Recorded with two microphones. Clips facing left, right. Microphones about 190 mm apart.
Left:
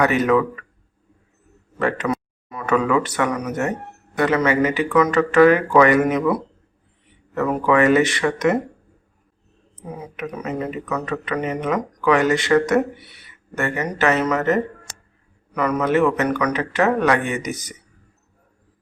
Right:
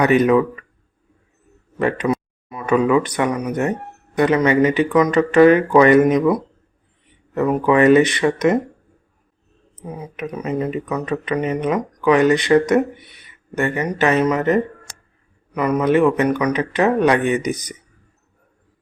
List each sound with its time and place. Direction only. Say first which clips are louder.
0.0 s speech: right 3 dB; 20° right (ahead or behind)
1.8 s speech: right 3 dB; 15° right (ahead or behind)
10.2 s speech: right 4 dB; 20° right (ahead or behind)